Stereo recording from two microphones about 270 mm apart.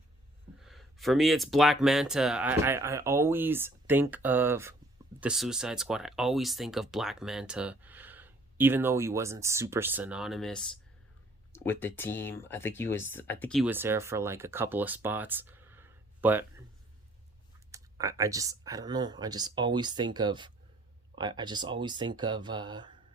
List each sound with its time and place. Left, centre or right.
0.6 s speech: centre
17.7 s speech: centre